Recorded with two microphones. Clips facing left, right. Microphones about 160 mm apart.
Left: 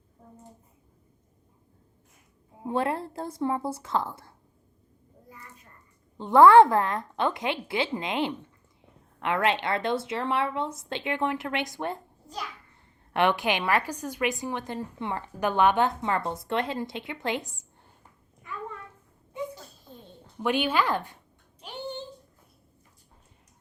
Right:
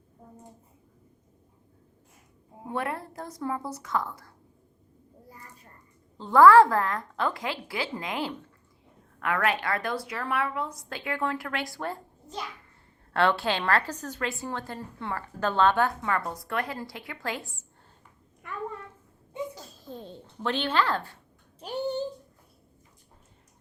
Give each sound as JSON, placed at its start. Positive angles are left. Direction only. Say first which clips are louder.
{"t": 2.6, "sound": "speech", "louder": "left 4 dB", "side_deg": 25}
{"t": 6.2, "sound": "speech", "louder": "left 1 dB", "side_deg": 20}
{"t": 13.1, "sound": "a woman's voice", "louder": "left 1 dB", "side_deg": 15}
{"t": 19.5, "sound": "a sound", "louder": "right 6 dB", "side_deg": -90}
{"t": 20.4, "sound": "a woman's voice", "louder": "left 2 dB", "side_deg": 10}
{"t": 21.6, "sound": "a sound", "louder": "right 7 dB", "side_deg": -40}